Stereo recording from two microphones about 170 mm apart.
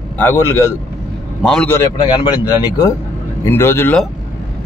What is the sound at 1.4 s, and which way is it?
Speech, centre (ahead or behind).